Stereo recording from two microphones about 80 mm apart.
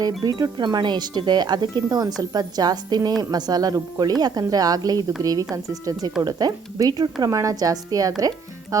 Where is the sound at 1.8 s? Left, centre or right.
Right.